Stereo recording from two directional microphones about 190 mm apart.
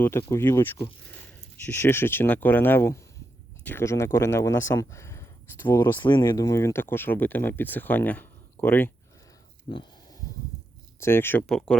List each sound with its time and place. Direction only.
0.0 s speech: 15° left (ahead or behind)
6.0 s speech: 25° left (ahead or behind)
9.7 s a sound: 25° left (ahead or behind)
11.0 s speech: 10° left (ahead or behind)